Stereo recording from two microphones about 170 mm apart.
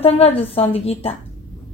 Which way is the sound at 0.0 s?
35° left (ahead or behind).